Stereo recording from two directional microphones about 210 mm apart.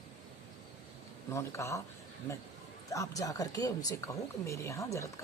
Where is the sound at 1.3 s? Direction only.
15° left (ahead or behind).